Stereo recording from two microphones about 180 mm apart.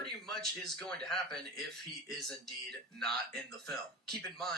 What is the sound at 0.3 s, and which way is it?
Speech, centre (ahead or behind).